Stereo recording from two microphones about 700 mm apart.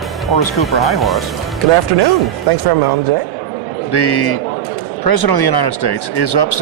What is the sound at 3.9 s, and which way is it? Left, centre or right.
Speech, left.